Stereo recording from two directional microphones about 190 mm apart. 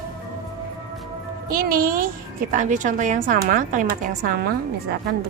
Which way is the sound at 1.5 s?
50° right (ahead or behind).